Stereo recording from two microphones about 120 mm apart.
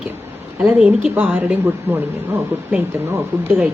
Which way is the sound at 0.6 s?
15° right (ahead or behind).